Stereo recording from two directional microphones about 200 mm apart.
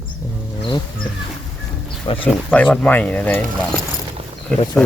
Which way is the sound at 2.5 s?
5° left (ahead or behind).